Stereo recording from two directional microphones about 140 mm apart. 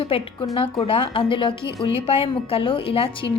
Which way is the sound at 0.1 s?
40° left (ahead or behind).